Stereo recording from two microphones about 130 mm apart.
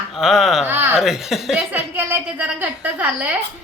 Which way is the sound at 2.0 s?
15° right (ahead or behind).